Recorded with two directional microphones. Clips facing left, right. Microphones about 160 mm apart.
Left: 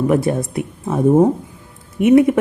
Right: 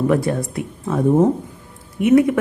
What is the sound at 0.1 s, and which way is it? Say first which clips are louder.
Speech: left 2 dB; 20° left (ahead or behind).